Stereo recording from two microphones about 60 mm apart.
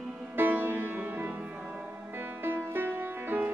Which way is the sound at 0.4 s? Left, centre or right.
Right.